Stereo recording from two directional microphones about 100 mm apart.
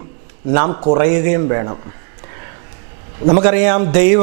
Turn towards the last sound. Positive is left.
turn(degrees=-15)  # may be behind; listen again after turning